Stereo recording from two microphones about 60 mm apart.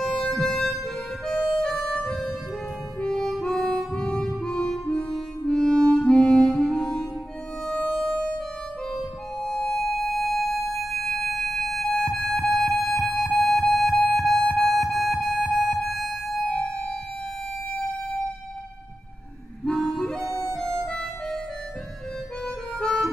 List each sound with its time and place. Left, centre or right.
0.0 s music: centre
1.2 s harmonica: centre
4.5 s music: centre
19.6 s harmonica: centre
20.2 s music: right
22.8 s harmonica: centre